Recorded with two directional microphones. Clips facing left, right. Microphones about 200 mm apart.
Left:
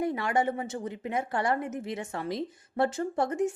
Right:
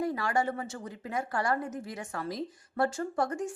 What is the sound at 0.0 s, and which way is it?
Speech, 20° left (ahead or behind).